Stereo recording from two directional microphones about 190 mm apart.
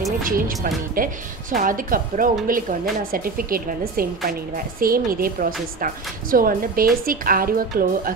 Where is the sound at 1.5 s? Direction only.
45° right (ahead or behind).